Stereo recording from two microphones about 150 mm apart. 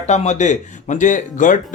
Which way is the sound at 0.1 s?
50° left (ahead or behind).